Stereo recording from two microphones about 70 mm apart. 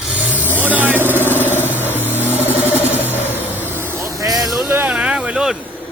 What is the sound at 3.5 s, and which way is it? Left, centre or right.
Vehicle, right.